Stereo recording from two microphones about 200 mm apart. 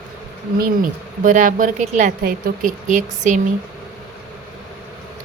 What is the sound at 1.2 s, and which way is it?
Speech, 40° right (ahead or behind).